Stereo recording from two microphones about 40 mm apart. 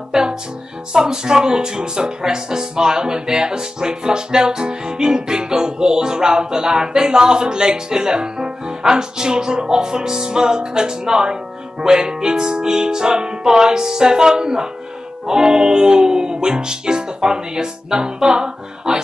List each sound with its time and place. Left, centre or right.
0.1 s music: centre
0.9 s speech: centre
11.8 s music: centre
15.2 s speech: centre